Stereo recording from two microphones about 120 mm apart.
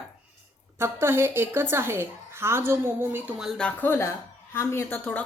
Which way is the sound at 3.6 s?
15° left (ahead or behind).